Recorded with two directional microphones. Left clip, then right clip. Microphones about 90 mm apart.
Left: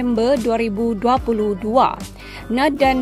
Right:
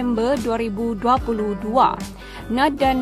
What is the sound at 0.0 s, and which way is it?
A woman's voice, 30° left (ahead or behind).